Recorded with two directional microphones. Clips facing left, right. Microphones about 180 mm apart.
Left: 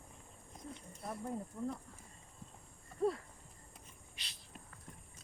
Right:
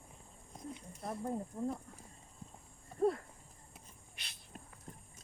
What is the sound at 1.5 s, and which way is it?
Speech, 35° right (ahead or behind).